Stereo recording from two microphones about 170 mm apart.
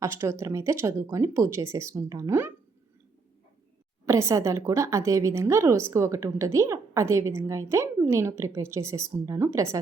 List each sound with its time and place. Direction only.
0.0 s a woman's voice: 15° right (ahead or behind)
4.0 s a woman's voice: 15° right (ahead or behind)